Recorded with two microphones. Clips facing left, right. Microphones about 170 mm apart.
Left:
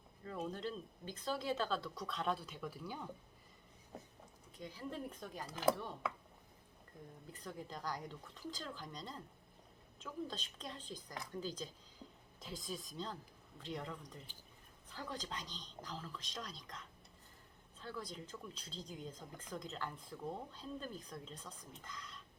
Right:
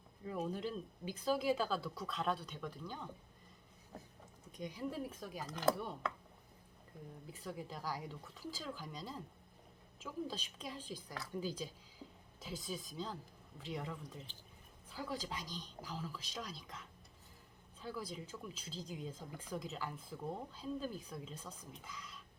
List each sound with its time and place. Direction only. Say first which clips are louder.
0.3 s speech: right 2 dB; 10° right (ahead or behind); by 3.1 s 10° left (ahead or behind)
4.5 s a woman's voice: right 5 dB; 15° right (ahead or behind)
4.9 s speech: right 2 dB; 5° right (ahead or behind)
7.3 s a woman's voice: right 2 dB; 5° right (ahead or behind)